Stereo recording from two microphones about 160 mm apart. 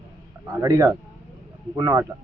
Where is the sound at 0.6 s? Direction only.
20° right (ahead or behind).